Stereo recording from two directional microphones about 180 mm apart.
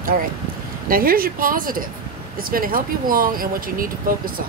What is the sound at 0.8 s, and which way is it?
Speech, 55° right (ahead or behind).